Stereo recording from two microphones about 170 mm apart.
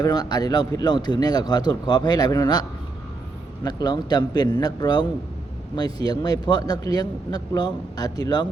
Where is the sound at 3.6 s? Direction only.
25° left (ahead or behind).